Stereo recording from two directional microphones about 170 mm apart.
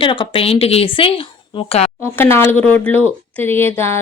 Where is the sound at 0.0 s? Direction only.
30° left (ahead or behind).